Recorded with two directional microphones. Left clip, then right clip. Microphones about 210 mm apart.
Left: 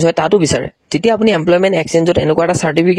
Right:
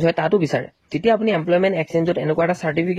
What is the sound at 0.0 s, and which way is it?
Speech, 45° left (ahead or behind).